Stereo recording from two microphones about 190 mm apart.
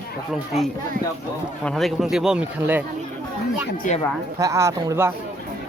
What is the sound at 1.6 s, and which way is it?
Speech, centre (ahead or behind).